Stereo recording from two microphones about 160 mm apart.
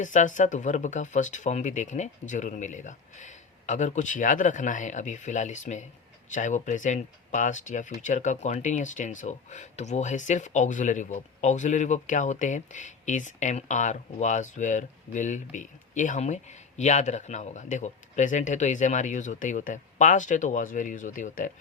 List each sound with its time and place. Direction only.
0.0 s speech: 50° left (ahead or behind)